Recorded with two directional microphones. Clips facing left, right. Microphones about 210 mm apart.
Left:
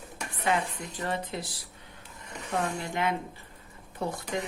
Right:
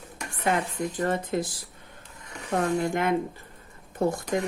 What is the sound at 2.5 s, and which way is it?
Speech, 50° right (ahead or behind).